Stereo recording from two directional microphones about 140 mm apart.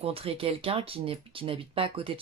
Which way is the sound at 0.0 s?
45° right (ahead or behind).